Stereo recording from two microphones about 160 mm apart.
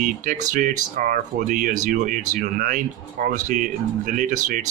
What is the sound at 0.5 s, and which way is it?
Speech, 60° right (ahead or behind).